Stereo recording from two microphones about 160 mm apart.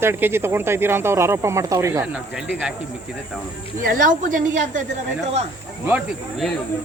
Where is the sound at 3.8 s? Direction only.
55° right (ahead or behind).